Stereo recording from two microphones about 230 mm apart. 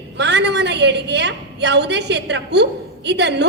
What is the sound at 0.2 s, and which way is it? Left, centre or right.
A woman's voice, right.